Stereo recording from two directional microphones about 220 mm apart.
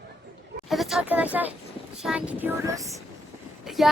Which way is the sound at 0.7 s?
Centre (ahead or behind).